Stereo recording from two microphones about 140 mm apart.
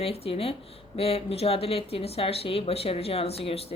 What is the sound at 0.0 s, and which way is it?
Speech, 45° left (ahead or behind).